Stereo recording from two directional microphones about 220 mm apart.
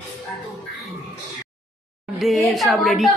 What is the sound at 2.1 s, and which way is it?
A woman's voice, centre (ahead or behind).